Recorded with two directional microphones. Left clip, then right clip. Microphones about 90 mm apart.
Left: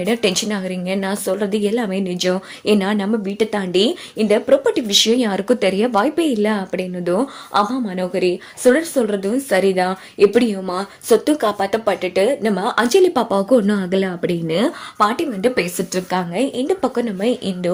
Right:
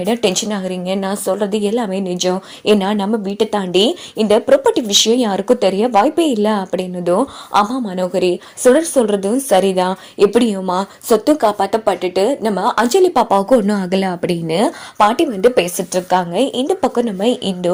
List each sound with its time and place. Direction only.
0.0 s speech: 15° right (ahead or behind)
6.1 s speech: 30° right (ahead or behind)
8.7 s a woman's voice: 50° right (ahead or behind)
11.1 s speech: 15° right (ahead or behind)
13.7 s speech: 80° right; by 14.7 s 50° right (ahead or behind)
14.9 s speech: 35° right (ahead or behind)